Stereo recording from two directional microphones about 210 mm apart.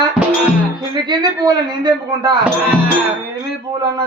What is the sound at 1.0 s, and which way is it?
A man's voice, 20° right (ahead or behind).